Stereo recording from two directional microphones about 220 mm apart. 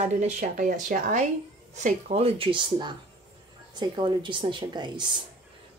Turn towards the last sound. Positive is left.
turn(degrees=-20)  # may be behind; listen again after turning